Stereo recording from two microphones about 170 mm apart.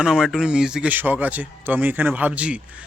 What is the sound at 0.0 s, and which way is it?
Speech, 5° right (ahead or behind).